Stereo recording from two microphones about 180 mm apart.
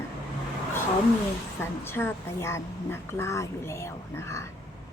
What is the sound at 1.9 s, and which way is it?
A woman's voice, 10° left (ahead or behind).